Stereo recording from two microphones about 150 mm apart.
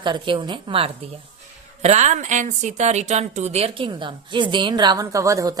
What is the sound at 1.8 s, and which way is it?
Speech, 50° right (ahead or behind).